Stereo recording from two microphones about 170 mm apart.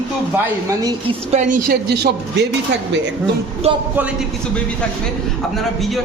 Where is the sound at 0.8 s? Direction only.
25° right (ahead or behind).